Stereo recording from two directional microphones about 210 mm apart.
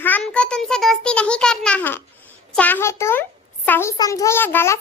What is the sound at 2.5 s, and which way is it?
A child's voice, 10° left (ahead or behind).